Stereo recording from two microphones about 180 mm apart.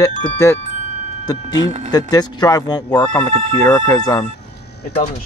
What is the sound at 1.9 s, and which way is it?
Speech, 20° left (ahead or behind).